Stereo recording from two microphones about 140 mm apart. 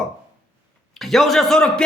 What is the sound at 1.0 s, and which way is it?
Speech, centre (ahead or behind).